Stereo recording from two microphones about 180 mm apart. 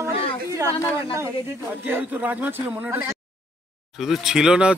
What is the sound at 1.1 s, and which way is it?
Speech, 15° right (ahead or behind).